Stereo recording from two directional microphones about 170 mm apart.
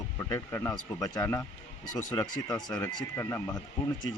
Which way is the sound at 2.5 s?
25° left (ahead or behind).